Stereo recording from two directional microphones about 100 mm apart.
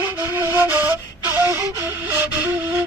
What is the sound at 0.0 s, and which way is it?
Flute, 20° right (ahead or behind).